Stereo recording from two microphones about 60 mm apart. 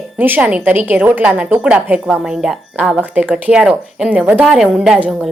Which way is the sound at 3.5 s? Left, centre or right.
Centre.